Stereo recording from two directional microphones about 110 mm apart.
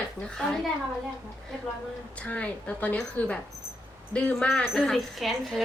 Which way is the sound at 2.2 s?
10° left (ahead or behind).